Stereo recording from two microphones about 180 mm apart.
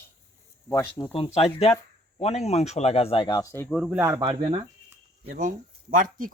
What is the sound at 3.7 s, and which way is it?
Speech, 5° right (ahead or behind).